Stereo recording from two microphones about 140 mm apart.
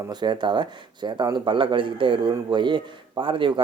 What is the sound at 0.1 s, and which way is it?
Speech, 30° right (ahead or behind).